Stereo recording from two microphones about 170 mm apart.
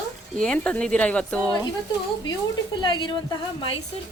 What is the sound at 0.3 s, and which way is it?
Speech, 5° left (ahead or behind).